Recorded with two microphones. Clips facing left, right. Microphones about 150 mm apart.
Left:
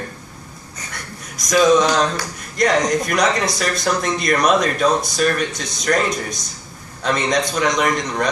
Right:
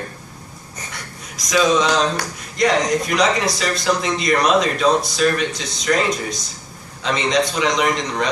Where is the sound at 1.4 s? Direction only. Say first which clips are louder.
Left 3 dB; 45° left (ahead or behind).